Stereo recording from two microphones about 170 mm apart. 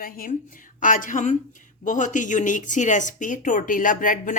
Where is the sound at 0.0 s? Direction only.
55° left (ahead or behind).